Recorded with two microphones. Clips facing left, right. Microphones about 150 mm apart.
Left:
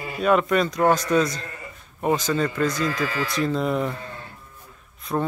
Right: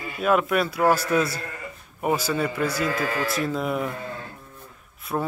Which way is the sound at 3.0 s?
50° right (ahead or behind).